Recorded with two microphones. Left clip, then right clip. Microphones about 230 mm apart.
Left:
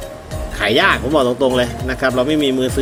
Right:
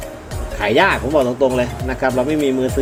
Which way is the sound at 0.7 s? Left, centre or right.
Centre.